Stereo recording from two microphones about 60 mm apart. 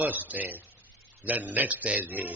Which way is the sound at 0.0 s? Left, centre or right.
Right.